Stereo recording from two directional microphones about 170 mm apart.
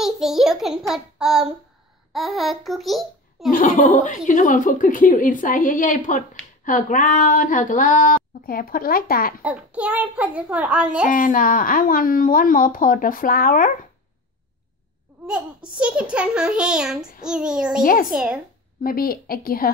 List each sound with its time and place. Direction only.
0.0 s a child's voice: centre (ahead or behind)
3.5 s speech: 50° left (ahead or behind)
9.4 s a child's voice: 5° right (ahead or behind)
11.1 s speech: 55° left (ahead or behind)
15.8 s a child's voice: 5° right (ahead or behind)
18.8 s speech: 60° left (ahead or behind)